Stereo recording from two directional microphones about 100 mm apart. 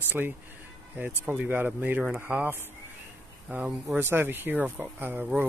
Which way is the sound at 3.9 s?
20° right (ahead or behind).